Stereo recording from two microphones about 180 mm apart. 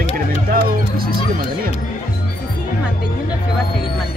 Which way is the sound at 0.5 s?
55° right (ahead or behind).